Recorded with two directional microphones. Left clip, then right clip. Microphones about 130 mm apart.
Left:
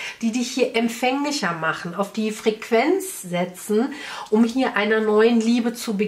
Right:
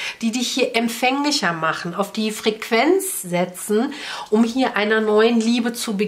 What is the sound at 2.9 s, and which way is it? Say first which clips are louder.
Speech: right 3 dB; 25° right (ahead or behind).